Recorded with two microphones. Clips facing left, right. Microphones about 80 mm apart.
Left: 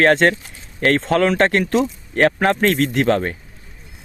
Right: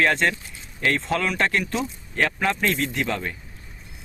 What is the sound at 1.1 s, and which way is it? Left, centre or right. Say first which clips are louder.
Speech: left 7 dB; left.